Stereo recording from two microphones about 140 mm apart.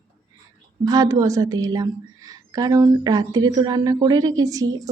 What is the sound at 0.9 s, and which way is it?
A woman's voice, 25° right (ahead or behind).